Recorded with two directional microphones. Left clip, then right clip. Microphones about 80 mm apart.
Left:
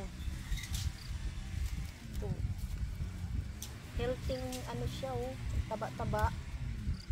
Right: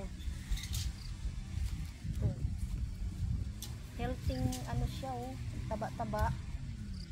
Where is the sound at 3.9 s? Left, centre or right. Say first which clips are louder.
Left 4 dB; left.